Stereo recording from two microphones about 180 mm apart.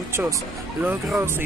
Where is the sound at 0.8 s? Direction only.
10° right (ahead or behind).